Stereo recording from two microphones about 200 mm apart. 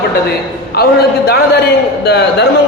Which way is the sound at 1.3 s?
55° left (ahead or behind).